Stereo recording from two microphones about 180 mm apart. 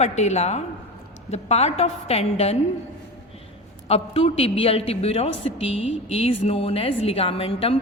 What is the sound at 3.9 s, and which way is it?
A woman's voice, 35° left (ahead or behind).